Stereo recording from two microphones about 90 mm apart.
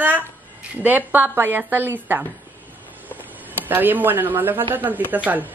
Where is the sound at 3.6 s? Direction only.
20° right (ahead or behind).